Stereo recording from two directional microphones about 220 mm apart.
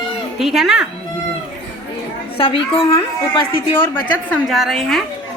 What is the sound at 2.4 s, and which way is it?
Speech, 25° left (ahead or behind).